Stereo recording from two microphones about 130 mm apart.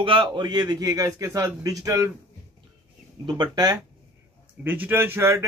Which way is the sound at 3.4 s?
30° right (ahead or behind).